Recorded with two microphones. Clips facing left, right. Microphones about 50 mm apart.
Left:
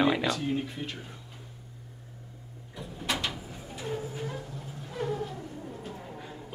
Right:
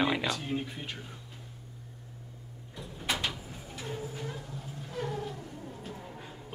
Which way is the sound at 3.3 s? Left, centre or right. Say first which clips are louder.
Left 2 dB; centre.